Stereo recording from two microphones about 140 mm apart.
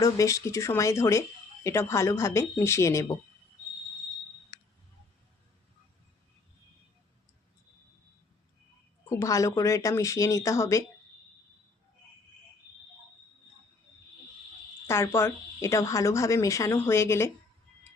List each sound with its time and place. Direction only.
0.0 s a woman's voice: 25° left (ahead or behind)
9.0 s a woman's voice: 20° left (ahead or behind)
14.8 s a woman's voice: 20° left (ahead or behind)